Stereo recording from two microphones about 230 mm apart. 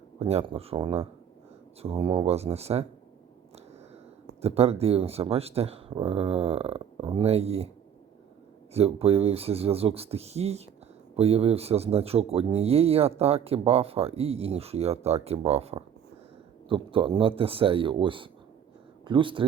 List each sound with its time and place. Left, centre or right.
0.2 s speech: right
4.4 s speech: right
8.7 s speech: right